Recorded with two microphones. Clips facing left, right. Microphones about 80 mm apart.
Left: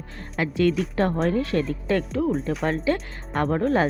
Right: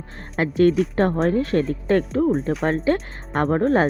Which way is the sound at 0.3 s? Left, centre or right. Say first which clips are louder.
Right 5 dB; right.